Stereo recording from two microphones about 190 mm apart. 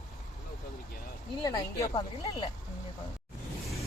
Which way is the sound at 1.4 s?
20° left (ahead or behind).